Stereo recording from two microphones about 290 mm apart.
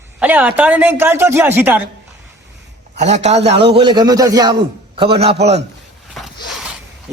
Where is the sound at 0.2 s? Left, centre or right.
Centre.